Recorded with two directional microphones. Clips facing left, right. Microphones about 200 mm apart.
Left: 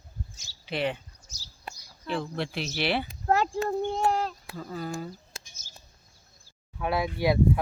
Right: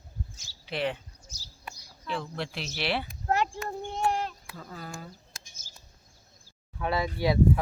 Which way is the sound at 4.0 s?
35° left (ahead or behind).